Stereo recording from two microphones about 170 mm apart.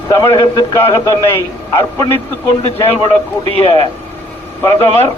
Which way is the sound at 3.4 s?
35° right (ahead or behind).